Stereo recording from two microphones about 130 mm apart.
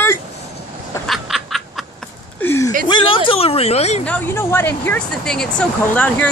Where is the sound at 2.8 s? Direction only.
40° left (ahead or behind); by 4.0 s 55° left (ahead or behind).